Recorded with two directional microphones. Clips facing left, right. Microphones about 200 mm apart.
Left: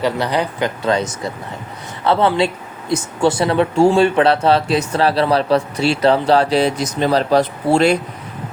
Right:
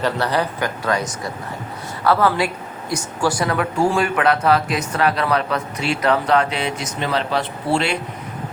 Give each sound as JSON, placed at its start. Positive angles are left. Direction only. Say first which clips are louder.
{"t": 0.0, "sound": "speech", "louder": "left 2 dB", "side_deg": 15}
{"t": 2.0, "sound": "speech", "louder": "left 2 dB", "side_deg": 25}